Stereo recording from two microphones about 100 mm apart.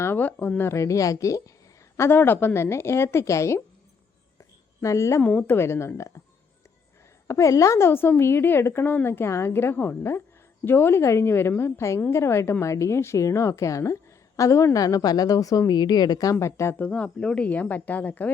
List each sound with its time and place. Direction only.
0.0 s a woman's voice: 20° left (ahead or behind)
2.0 s a woman's voice: 20° left (ahead or behind)
4.4 s a sound: 30° left (ahead or behind)
5.2 s a woman's voice: 15° left (ahead or behind)
7.3 s a woman's voice: 30° left (ahead or behind)
16.7 s speech: 15° left (ahead or behind)